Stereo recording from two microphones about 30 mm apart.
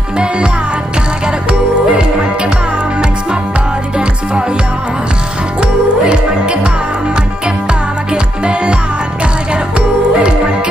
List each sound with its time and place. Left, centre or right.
1.2 s music: right
4.0 s music: right
5.6 s music: right
8.1 s music: right